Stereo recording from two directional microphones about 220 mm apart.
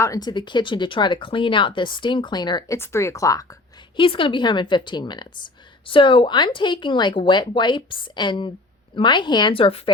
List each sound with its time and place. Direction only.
0.0 s speech: 15° left (ahead or behind)